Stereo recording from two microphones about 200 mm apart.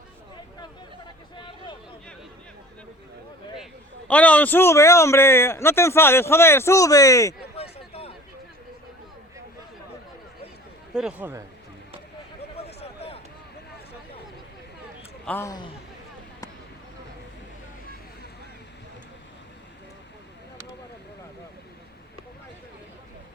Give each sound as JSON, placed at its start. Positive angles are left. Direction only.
{"t": 1.4, "sound": "vehicle", "side_deg": 25}
{"t": 4.1, "sound": "a man's voice", "side_deg": 5}
{"t": 7.5, "sound": "a sound", "side_deg": 30}
{"t": 10.9, "sound": "speech", "side_deg": -5}
{"t": 12.5, "sound": "a sound", "side_deg": 30}
{"t": 15.3, "sound": "a man's voice", "side_deg": 15}